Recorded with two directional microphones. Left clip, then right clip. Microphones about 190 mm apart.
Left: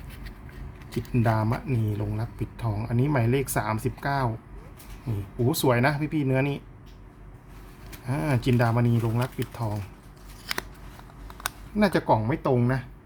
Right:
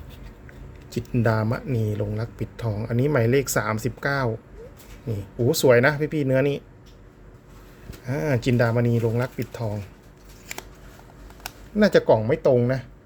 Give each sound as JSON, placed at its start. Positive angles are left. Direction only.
{"t": 1.2, "sound": "speech", "side_deg": -20}
{"t": 5.5, "sound": "speech", "side_deg": -20}
{"t": 8.0, "sound": "speech", "side_deg": -15}
{"t": 11.8, "sound": "speech", "side_deg": -20}